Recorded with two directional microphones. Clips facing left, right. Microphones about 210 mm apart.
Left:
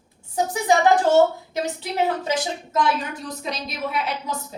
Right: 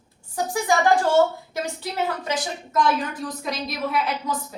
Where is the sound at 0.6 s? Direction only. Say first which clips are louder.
Left 2 dB; 20° left (ahead or behind).